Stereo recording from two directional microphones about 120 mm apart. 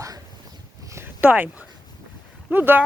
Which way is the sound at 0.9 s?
15° right (ahead or behind).